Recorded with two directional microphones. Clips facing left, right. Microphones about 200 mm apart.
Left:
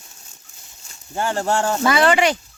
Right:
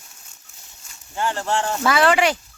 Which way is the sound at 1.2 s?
45° left (ahead or behind).